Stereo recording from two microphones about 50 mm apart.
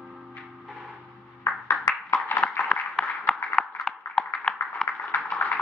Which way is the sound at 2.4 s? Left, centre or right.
Left.